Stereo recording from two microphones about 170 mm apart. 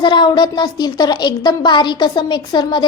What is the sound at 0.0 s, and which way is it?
Speech, 25° left (ahead or behind).